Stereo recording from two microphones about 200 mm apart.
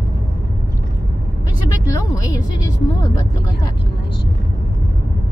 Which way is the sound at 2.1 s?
15° left (ahead or behind).